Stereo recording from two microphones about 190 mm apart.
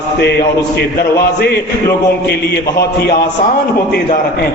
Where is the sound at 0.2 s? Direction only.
60° left (ahead or behind).